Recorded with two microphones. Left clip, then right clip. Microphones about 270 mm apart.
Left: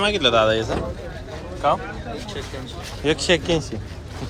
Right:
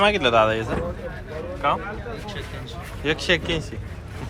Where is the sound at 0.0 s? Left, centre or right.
Centre.